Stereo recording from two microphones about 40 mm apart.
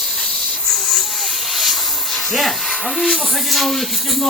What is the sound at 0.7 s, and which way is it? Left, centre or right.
Hiss, centre.